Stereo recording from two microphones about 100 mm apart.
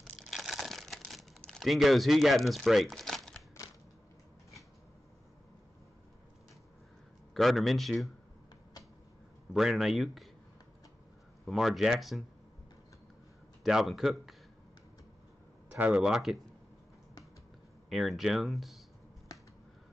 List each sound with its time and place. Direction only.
0.3 s crumpling: centre (ahead or behind)
7.3 s speech: centre (ahead or behind)
9.5 s speech: 5° right (ahead or behind)
11.4 s speech: centre (ahead or behind)
13.7 s speech: 5° right (ahead or behind)
15.9 s speech: 5° right (ahead or behind)
17.8 s speech: centre (ahead or behind)
19.3 s finger snapping: 40° left (ahead or behind)